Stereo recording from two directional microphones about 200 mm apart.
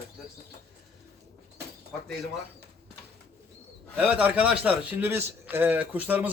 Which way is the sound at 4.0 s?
5° right (ahead or behind).